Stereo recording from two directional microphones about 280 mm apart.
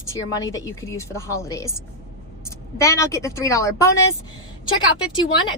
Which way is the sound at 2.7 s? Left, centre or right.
Centre.